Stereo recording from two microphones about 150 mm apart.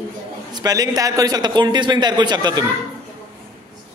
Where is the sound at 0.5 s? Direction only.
25° right (ahead or behind).